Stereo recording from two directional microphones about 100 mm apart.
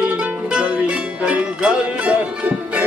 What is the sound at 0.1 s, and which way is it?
Music, 10° right (ahead or behind).